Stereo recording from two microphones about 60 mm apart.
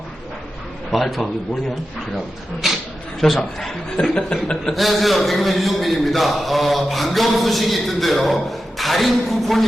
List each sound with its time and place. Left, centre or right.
0.9 s a man's voice: centre
4.0 s chuckle: centre
4.7 s a man's voice: centre